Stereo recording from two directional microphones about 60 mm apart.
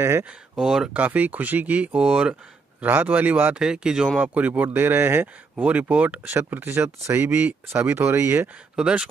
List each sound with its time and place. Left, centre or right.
0.6 s speech: centre
0.9 s speech: right
2.8 s speech: right
3.5 s speech: centre
4.2 s speech: right
5.6 s speech: right
6.3 s speech: right
8.7 s speech: centre